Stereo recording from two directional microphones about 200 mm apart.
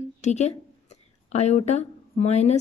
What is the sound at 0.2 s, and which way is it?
A woman's voice, 35° left (ahead or behind).